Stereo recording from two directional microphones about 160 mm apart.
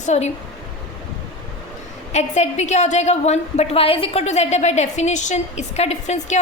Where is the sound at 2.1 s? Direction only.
45° left (ahead or behind).